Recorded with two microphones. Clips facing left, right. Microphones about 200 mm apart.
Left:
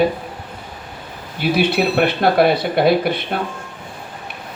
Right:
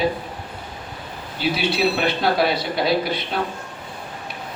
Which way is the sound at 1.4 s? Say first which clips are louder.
Left 4 dB; 55° left (ahead or behind).